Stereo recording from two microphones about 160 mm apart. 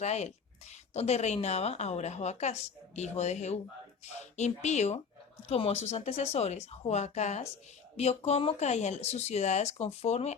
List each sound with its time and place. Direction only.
0.0 s speech: 45° left (ahead or behind)